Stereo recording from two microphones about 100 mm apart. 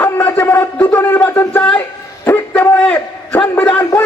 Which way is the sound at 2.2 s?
20° left (ahead or behind).